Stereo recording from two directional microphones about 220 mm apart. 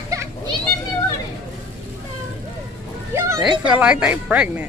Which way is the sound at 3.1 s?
10° right (ahead or behind).